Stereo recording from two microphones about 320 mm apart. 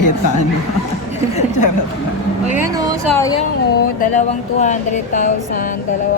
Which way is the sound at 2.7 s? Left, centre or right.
Centre.